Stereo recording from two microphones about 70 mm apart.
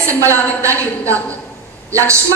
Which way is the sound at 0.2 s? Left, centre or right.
Right.